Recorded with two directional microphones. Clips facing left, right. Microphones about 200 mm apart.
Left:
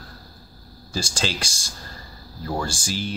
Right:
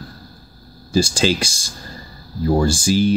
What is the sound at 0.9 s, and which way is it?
Speech, 10° right (ahead or behind).